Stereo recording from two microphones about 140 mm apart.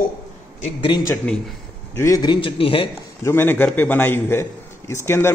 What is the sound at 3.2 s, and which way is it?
A man's voice, 15° left (ahead or behind).